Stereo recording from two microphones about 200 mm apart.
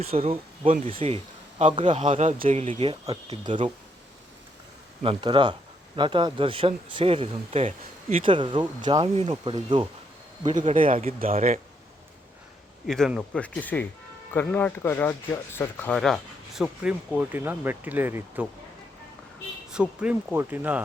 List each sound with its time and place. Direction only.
0.1 s speech: 30° right (ahead or behind)
5.0 s speech: 25° right (ahead or behind)
10.6 s speech: 40° right (ahead or behind)
12.9 s speech: centre (ahead or behind)
19.7 s speech: 5° right (ahead or behind)